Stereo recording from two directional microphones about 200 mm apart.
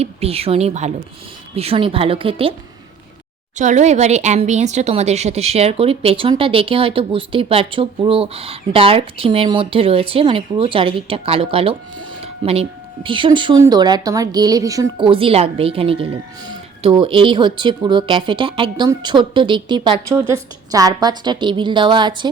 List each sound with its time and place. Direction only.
0.0 s speech: 30° right (ahead or behind)
3.6 s speech: 35° right (ahead or behind)